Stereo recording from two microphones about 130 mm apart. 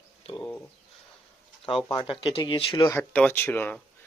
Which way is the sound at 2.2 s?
45° left (ahead or behind).